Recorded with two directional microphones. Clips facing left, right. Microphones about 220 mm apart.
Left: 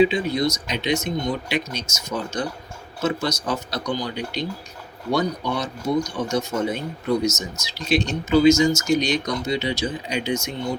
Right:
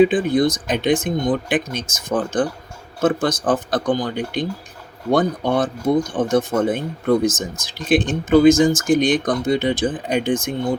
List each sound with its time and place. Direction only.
0.0 s speech: 50° right (ahead or behind)